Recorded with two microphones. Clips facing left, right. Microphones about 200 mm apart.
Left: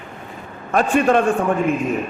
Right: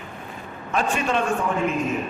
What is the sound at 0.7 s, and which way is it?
Speech, 55° left (ahead or behind).